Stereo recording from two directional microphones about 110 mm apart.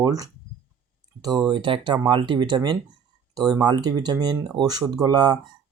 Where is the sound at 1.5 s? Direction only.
45° right (ahead or behind).